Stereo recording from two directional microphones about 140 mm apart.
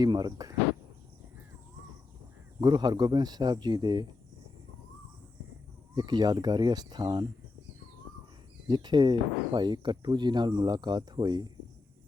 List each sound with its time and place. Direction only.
0.0 s speech: 30° right (ahead or behind)
2.6 s speech: 30° right (ahead or behind)
5.9 s speech: 30° right (ahead or behind)
8.6 s speech: 30° right (ahead or behind)